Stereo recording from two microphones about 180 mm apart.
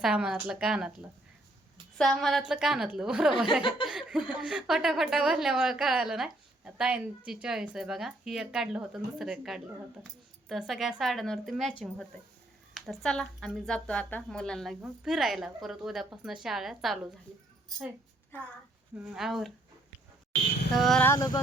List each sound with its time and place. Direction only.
0.0 s speech: 5° right (ahead or behind)
3.6 s vehicle: 25° left (ahead or behind)
3.8 s speech: 5° right (ahead or behind)
12.7 s speech: centre (ahead or behind)
18.9 s speech: 5° right (ahead or behind)
20.7 s speech: centre (ahead or behind)
21.1 s vehicle: 20° left (ahead or behind)